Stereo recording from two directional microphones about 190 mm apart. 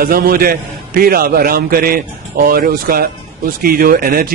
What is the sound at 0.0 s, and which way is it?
A man's voice, 50° right (ahead or behind).